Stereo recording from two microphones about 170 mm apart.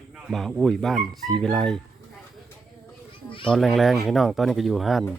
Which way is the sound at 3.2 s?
30° left (ahead or behind).